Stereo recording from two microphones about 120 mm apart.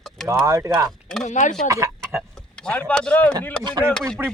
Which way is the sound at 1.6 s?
25° right (ahead or behind).